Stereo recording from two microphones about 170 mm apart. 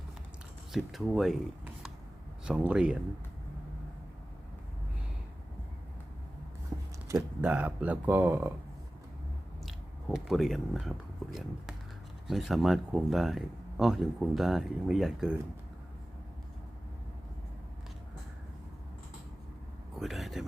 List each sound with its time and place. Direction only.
0.7 s speech: centre (ahead or behind)
7.1 s speech: 10° right (ahead or behind)
10.2 s speech: centre (ahead or behind)
12.3 s speech: centre (ahead or behind)
20.0 s a sound: centre (ahead or behind)